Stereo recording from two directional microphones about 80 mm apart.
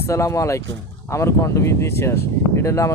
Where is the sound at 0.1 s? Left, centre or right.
Left.